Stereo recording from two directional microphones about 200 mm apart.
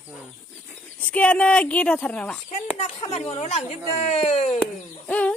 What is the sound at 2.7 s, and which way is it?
Speech, 30° left (ahead or behind).